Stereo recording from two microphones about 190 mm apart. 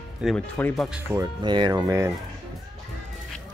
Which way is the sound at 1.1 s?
20° right (ahead or behind).